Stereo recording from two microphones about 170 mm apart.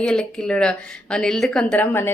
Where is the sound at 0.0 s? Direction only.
5° left (ahead or behind).